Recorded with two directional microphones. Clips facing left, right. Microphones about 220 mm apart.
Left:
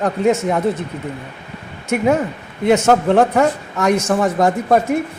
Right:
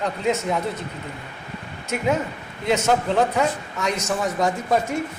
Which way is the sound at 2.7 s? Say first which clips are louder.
Left 7 dB; 60° left (ahead or behind).